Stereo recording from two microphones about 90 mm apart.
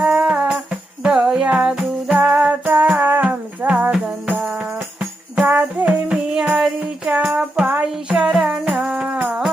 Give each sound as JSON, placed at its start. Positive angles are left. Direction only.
{"t": 0.0, "sound": "music", "side_deg": -10}